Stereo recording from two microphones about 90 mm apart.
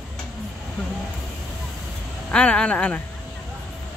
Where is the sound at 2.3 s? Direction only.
10° left (ahead or behind).